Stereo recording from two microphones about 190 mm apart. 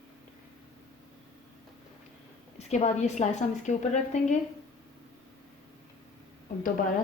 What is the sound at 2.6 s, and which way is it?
A woman's voice, 35° left (ahead or behind).